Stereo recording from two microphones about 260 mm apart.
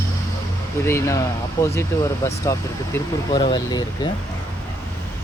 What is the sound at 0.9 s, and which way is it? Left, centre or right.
Speech, centre.